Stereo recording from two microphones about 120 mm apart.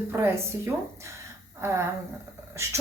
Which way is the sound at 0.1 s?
20° right (ahead or behind).